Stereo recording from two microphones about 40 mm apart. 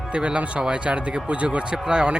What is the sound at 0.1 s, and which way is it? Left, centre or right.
A man's voice, right.